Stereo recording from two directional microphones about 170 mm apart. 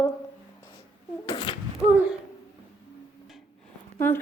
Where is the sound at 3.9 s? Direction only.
10° left (ahead or behind).